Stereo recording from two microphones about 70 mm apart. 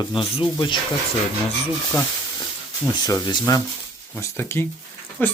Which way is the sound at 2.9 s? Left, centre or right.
Left.